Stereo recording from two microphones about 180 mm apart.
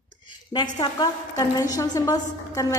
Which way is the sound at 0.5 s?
20° left (ahead or behind).